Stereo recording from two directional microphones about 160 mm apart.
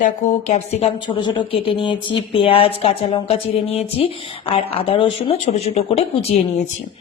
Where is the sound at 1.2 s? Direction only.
30° left (ahead or behind).